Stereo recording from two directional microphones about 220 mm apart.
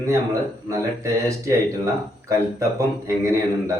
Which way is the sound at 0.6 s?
15° right (ahead or behind).